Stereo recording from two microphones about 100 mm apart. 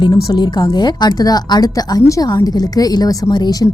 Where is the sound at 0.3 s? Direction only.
45° left (ahead or behind).